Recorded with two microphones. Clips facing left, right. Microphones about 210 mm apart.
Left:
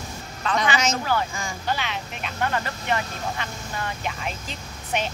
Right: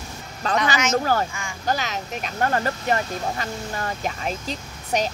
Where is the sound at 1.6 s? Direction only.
40° right (ahead or behind).